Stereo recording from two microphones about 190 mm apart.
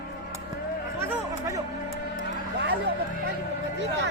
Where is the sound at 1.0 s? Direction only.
15° right (ahead or behind).